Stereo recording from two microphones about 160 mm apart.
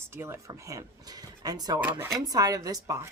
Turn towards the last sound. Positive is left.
turn(degrees=-20)  # may be behind; listen again after turning